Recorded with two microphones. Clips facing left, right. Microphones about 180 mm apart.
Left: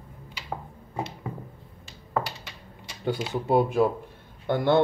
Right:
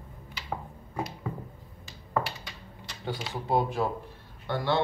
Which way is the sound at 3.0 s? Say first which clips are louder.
Left 7 dB; 55° left (ahead or behind).